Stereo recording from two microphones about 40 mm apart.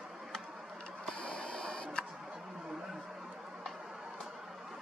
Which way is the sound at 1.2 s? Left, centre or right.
Left.